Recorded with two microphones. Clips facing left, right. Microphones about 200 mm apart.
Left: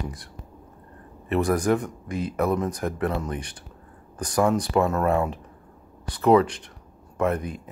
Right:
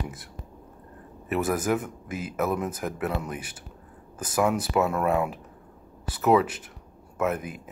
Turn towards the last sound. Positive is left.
turn(degrees=-5)  # may be behind; listen again after turning